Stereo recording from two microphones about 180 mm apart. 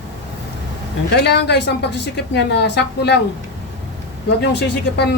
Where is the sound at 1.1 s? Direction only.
70° left (ahead or behind).